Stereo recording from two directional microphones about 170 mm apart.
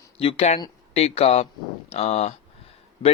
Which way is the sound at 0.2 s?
35° left (ahead or behind).